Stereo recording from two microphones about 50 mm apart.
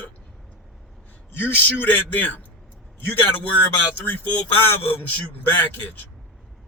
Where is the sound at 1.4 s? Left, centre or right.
Left.